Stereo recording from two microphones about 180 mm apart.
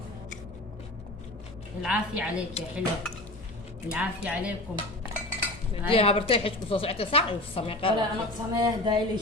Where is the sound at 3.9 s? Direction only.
5° right (ahead or behind).